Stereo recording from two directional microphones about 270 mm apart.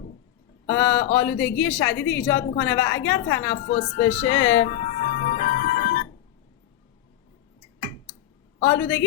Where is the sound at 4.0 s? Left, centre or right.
Left.